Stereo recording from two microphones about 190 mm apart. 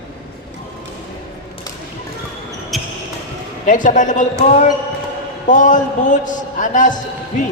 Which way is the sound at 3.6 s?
45° left (ahead or behind).